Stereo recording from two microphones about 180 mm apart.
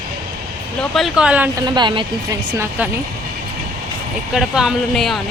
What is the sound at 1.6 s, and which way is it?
Speech, 25° right (ahead or behind).